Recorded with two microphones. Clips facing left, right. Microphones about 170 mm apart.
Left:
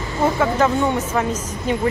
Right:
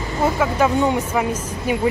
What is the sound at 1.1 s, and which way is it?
Speech, 10° right (ahead or behind).